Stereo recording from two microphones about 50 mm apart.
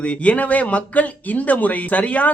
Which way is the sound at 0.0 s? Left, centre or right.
Left.